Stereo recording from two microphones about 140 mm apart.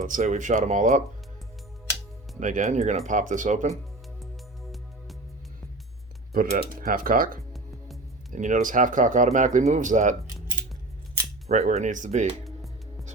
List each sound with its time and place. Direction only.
0.0 s speech: 60° right (ahead or behind)
2.4 s speech: 65° right (ahead or behind)
3.1 s speech: 65° right (ahead or behind)
4.2 s music: centre (ahead or behind)
6.6 s speech: 90° right
8.3 s speech: 60° right (ahead or behind)
11.4 s speech: 50° right (ahead or behind)